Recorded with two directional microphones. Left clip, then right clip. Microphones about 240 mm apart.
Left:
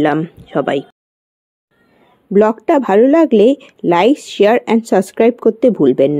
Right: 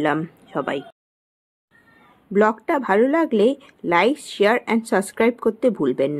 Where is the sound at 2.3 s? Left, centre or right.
Left.